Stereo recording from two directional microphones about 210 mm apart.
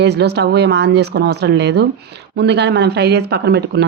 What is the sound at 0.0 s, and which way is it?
Speech, 55° right (ahead or behind).